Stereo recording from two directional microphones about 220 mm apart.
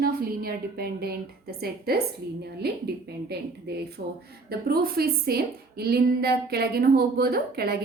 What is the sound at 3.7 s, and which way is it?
A woman's voice, 50° right (ahead or behind).